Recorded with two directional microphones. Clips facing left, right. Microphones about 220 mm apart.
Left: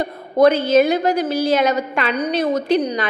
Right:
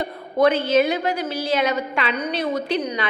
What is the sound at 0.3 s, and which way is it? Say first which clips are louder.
A woman's voice: left 4 dB; 40° left (ahead or behind).